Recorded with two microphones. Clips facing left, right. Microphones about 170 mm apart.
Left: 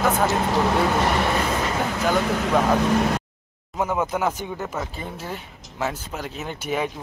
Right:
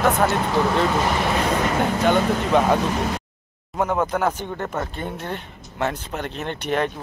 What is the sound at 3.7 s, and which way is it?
Speech, 5° left (ahead or behind).